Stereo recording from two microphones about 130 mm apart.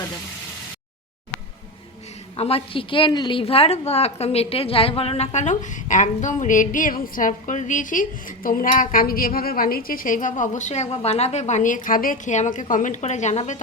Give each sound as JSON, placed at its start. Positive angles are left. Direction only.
{"t": 2.3, "sound": "a woman's voice", "side_deg": 50}